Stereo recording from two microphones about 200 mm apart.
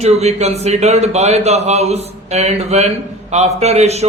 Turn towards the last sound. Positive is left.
turn(degrees=-30)  # may be behind; listen again after turning